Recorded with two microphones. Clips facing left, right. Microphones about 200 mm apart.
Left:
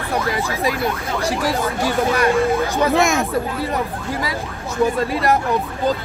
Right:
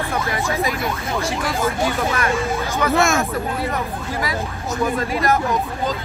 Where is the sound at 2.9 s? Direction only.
15° left (ahead or behind).